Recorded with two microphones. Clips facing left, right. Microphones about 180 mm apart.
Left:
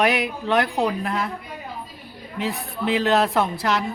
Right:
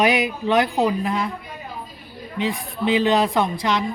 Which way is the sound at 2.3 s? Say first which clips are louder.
Right 2 dB; centre (ahead or behind).